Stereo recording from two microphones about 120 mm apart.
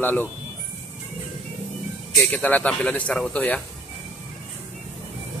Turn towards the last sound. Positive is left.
turn(degrees=10)  # may be behind; listen again after turning